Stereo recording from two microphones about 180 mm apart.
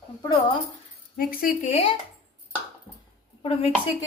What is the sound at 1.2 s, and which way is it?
Speech, 55° left (ahead or behind).